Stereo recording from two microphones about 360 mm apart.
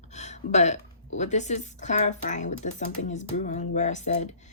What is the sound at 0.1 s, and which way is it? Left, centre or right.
A woman's voice, centre.